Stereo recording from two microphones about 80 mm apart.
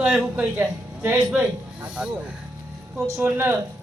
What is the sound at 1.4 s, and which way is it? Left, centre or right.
Speech, centre.